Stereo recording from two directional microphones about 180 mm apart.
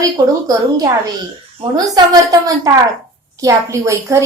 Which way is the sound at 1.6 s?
35° right (ahead or behind).